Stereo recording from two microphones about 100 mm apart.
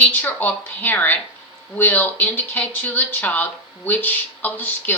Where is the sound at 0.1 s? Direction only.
15° left (ahead or behind).